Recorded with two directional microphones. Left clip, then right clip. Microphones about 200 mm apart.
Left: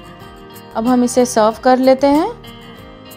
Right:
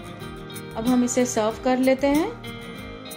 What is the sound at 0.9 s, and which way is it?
Speech, 35° left (ahead or behind).